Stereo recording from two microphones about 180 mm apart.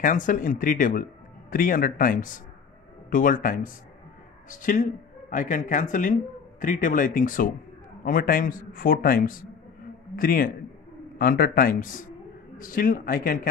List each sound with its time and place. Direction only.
0.0 s a man's voice: 45° left (ahead or behind)